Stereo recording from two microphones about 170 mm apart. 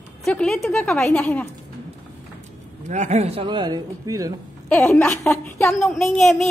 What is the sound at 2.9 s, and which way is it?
Speech, 45° right (ahead or behind).